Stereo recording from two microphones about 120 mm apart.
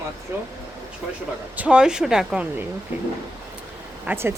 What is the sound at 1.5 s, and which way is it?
Speech, 10° right (ahead or behind).